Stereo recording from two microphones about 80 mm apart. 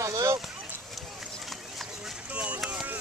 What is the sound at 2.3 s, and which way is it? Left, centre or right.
Run, centre.